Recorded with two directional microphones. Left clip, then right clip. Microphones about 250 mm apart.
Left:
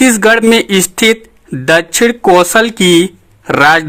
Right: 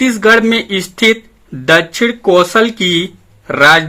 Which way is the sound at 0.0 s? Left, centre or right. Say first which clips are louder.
Left 1 dB; left.